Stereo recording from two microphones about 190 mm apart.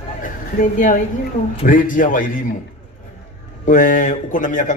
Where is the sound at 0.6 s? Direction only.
45° left (ahead or behind).